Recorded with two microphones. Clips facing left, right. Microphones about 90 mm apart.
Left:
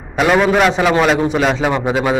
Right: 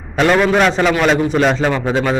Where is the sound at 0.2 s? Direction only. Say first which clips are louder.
Even; 5° left (ahead or behind).